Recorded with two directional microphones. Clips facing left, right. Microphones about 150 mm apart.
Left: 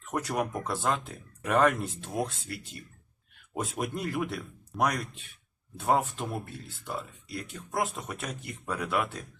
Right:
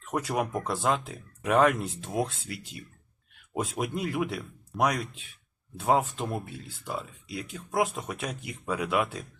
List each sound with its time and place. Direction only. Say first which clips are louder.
0.1 s speech: right 2 dB; centre (ahead or behind)